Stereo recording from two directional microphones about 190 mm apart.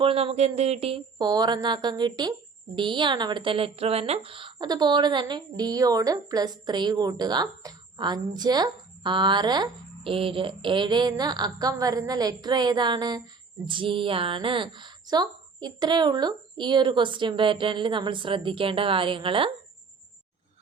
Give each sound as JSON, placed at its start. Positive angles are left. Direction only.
{"t": 0.0, "sound": "a woman's voice", "side_deg": -30}